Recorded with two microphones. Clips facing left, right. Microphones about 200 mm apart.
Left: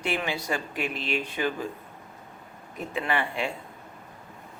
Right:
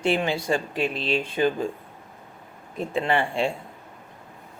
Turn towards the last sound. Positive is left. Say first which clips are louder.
# right 5 dB
turn(degrees=-30)  # may be behind; listen again after turning